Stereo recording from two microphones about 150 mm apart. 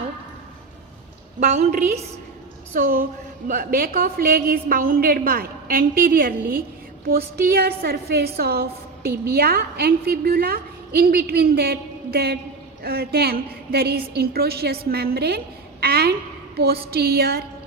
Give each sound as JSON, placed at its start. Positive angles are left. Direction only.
{"t": 1.4, "sound": "a woman's voice", "side_deg": -50}
{"t": 2.7, "sound": "a woman's voice", "side_deg": -70}
{"t": 7.4, "sound": "a woman's voice", "side_deg": -90}